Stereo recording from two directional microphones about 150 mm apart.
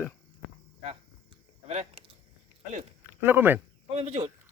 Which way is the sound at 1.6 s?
45° right (ahead or behind).